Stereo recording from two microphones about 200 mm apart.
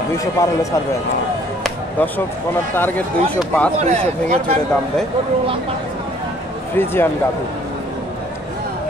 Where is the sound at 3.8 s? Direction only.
30° right (ahead or behind).